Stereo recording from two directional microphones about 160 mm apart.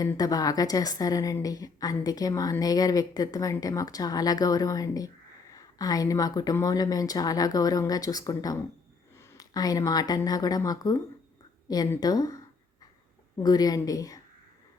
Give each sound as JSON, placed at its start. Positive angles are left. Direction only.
{"t": 0.0, "sound": "a woman's voice", "side_deg": 20}
{"t": 13.4, "sound": "a woman's voice", "side_deg": 25}